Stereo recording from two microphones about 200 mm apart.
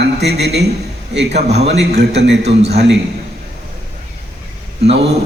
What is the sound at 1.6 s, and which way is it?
A man's voice, 60° right (ahead or behind).